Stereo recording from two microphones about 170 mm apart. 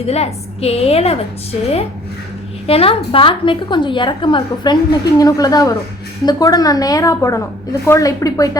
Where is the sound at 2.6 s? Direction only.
35° left (ahead or behind).